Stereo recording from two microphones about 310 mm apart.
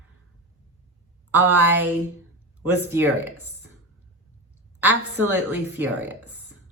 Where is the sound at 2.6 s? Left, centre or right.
Centre.